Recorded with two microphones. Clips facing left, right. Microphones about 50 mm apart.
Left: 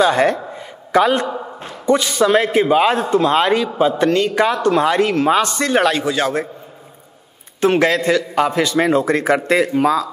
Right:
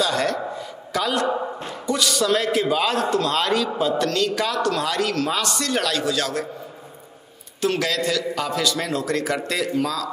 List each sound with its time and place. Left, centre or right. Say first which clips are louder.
0.0 s a sound: left 7 dB; left
1.9 s a man's voice: left 7 dB; left
7.6 s a man's voice: left 8 dB; left